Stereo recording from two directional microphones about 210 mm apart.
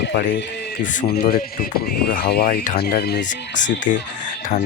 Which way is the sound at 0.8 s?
40° left (ahead or behind).